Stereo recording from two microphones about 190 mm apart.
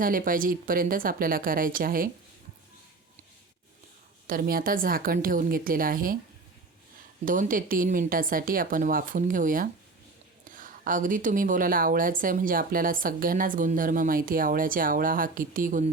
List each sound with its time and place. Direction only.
0.0 s a woman's voice: 45° right (ahead or behind)
4.3 s a woman's voice: 50° right (ahead or behind)
7.3 s a woman's voice: 45° right (ahead or behind)